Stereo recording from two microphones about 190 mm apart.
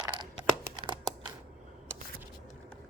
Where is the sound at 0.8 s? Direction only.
25° right (ahead or behind).